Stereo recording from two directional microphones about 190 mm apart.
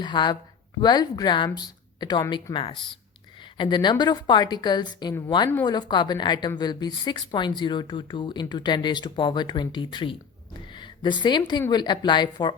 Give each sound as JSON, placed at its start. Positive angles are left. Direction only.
{"t": 0.0, "sound": "speech", "side_deg": 25}